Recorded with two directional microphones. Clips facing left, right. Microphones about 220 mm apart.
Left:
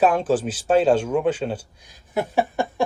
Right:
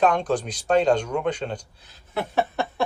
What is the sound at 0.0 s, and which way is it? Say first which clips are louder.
Speech: left 3 dB; 5° left (ahead or behind).